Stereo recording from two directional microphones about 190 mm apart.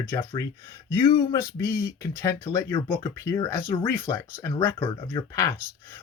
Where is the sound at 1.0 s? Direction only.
25° left (ahead or behind).